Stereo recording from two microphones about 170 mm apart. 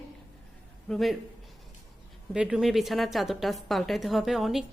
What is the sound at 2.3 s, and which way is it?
A woman's voice, 5° right (ahead or behind).